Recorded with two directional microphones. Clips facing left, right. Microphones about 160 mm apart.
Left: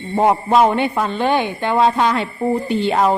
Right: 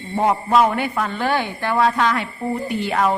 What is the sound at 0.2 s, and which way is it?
A man's voice, 20° left (ahead or behind).